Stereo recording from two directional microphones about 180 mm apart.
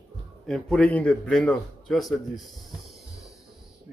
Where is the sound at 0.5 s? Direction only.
5° left (ahead or behind).